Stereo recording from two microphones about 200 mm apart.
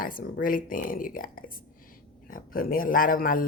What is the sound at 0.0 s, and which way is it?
Speech, 45° left (ahead or behind).